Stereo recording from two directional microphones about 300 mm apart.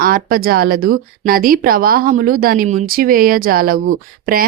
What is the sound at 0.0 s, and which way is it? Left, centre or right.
Speech, right.